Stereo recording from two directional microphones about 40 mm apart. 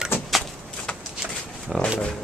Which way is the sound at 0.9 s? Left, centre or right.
Centre.